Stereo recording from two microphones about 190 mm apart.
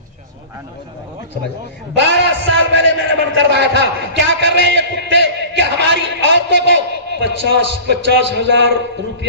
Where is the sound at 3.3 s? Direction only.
70° right (ahead or behind).